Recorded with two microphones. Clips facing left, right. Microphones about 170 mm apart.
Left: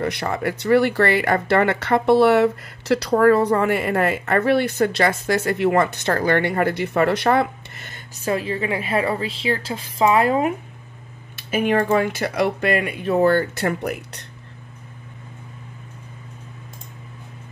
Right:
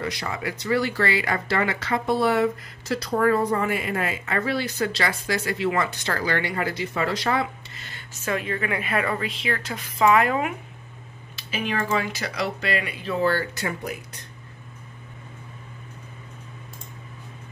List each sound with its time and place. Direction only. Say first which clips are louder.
0.0 s speech: left 6 dB; 55° left (ahead or behind)
8.3 s a woman's voice: left 4 dB; 30° left (ahead or behind)
11.3 s computer keyboard: left 8 dB; 55° left (ahead or behind)
11.9 s speech: left 7 dB; 50° left (ahead or behind)